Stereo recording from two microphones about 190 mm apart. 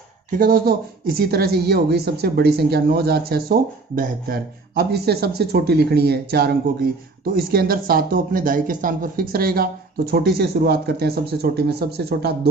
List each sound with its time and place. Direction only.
0.3 s speech: 50° right (ahead or behind)